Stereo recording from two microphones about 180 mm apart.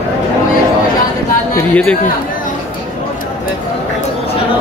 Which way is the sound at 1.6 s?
5° left (ahead or behind).